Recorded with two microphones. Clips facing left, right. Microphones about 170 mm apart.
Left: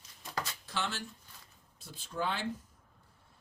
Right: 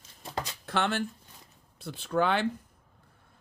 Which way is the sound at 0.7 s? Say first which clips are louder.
Right 9 dB; 60° right (ahead or behind).